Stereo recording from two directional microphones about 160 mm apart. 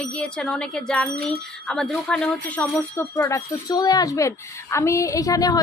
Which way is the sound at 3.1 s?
20° left (ahead or behind).